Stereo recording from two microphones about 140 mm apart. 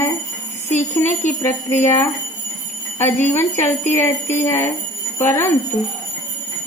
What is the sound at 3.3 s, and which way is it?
Speech, 15° left (ahead or behind).